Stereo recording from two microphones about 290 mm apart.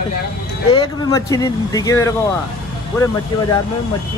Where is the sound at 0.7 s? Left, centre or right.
Centre.